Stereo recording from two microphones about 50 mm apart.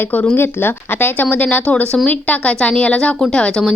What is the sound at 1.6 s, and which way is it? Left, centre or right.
A woman's voice, left.